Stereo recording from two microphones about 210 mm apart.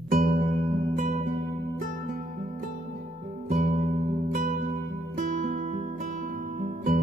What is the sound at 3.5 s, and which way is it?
Music, 30° right (ahead or behind).